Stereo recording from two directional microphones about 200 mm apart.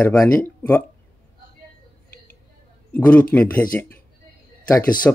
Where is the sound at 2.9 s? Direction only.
5° left (ahead or behind).